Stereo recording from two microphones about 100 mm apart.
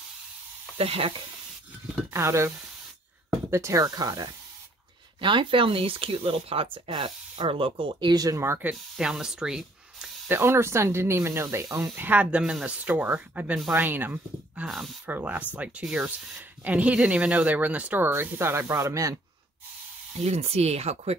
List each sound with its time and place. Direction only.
0.7 s speech: 70° right (ahead or behind)
2.1 s speech: 25° right (ahead or behind)
5.2 s speech: 55° right (ahead or behind)
8.1 s speech: 35° right (ahead or behind)
8.9 s speech: 5° right (ahead or behind)
10.2 s speech: 20° right (ahead or behind)
20.2 s speech: 90° right